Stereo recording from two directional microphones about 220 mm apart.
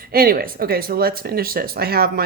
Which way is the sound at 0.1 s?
40° right (ahead or behind).